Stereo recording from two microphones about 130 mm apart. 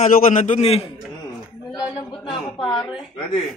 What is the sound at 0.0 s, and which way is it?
Speech, 75° left (ahead or behind).